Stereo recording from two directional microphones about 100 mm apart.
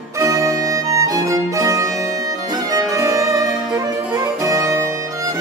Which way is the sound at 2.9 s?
35° right (ahead or behind).